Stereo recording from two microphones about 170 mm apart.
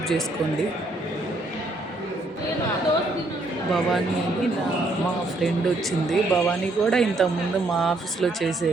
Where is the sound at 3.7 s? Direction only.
Centre (ahead or behind).